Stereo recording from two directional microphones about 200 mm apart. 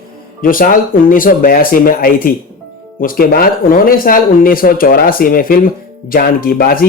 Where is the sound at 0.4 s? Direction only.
45° left (ahead or behind).